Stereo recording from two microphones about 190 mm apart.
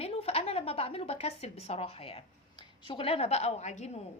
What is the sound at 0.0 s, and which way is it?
A woman's voice, 30° left (ahead or behind).